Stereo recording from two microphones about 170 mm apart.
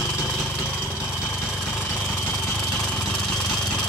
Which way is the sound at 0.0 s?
5° left (ahead or behind).